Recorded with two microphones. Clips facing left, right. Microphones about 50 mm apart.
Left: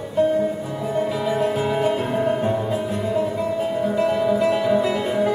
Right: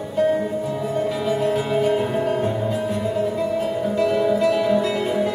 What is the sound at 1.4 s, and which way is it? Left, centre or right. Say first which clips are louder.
Music: right 1 dB; left.